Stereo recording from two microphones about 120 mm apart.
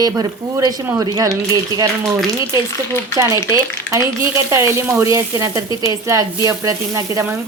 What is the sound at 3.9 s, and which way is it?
Speech, 25° right (ahead or behind).